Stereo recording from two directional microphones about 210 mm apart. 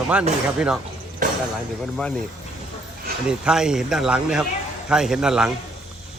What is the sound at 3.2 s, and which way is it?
Speech, 5° right (ahead or behind).